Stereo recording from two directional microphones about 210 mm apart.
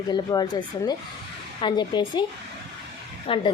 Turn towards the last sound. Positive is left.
turn(degrees=25)  # may be behind; listen again after turning